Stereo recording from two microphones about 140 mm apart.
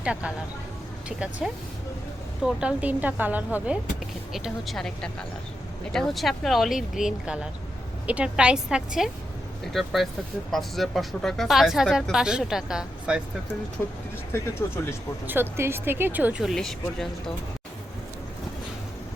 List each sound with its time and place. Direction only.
0.0 s a woman's voice: 10° right (ahead or behind)
13.8 s speech: 15° left (ahead or behind)
15.3 s a woman's voice: 15° right (ahead or behind)
16.4 s speech: centre (ahead or behind)